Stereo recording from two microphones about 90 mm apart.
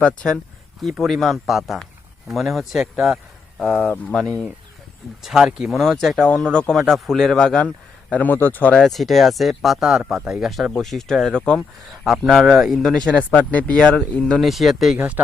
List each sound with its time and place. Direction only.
0.0 s speech: 10° left (ahead or behind); by 3.2 s 5° right (ahead or behind)
3.8 s a man's voice: 20° left (ahead or behind)
4.1 s speech: 10° left (ahead or behind)
5.2 s speech: 5° right (ahead or behind); by 7.7 s 10° left (ahead or behind)
8.1 s a man's voice: 20° left (ahead or behind)
8.7 s speech: centre (ahead or behind)
12.0 s speech: 5° right (ahead or behind); by 14.3 s 15° left (ahead or behind)
14.3 s speech: centre (ahead or behind)
14.9 s speech: 15° right (ahead or behind)